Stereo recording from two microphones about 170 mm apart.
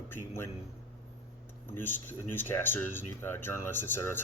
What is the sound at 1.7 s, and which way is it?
A man's voice, 10° left (ahead or behind).